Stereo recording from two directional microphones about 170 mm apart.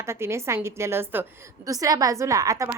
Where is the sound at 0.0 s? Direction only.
15° right (ahead or behind).